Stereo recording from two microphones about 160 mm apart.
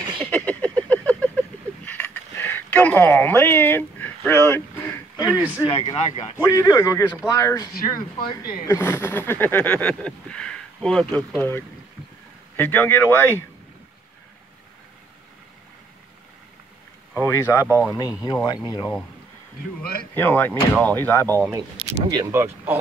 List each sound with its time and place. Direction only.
0.2 s a sound: 10° left (ahead or behind)
5.1 s a man's voice: 20° left (ahead or behind)
5.7 s speech: 35° left (ahead or behind)
6.3 s speech: 20° left (ahead or behind)
17.2 s speech: 15° left (ahead or behind)
19.8 s speech: 70° left (ahead or behind)
20.2 s speech: 10° left (ahead or behind)
21.8 s speech: 40° right (ahead or behind)
22.1 s speech: 20° right (ahead or behind)